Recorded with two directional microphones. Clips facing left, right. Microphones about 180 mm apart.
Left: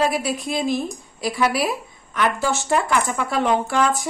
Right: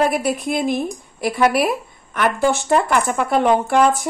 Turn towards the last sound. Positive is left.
turn(degrees=-55)  # may be behind; listen again after turning